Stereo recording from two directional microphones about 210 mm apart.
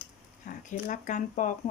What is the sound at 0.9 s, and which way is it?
Speech, 35° left (ahead or behind).